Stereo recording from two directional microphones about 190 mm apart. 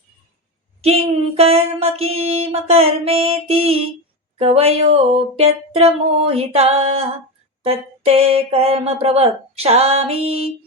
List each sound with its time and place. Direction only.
1.4 s speech: 30° right (ahead or behind)